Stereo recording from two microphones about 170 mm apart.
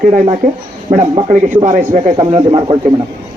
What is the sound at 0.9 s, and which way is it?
Speech, 30° right (ahead or behind).